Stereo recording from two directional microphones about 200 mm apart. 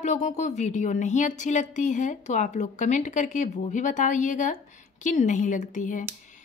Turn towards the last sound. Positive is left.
turn(degrees=40)  # may be behind; listen again after turning